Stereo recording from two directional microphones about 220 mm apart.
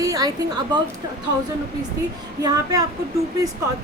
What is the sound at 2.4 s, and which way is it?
Speech, 15° right (ahead or behind).